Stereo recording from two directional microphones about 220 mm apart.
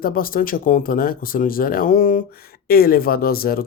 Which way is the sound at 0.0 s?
40° left (ahead or behind).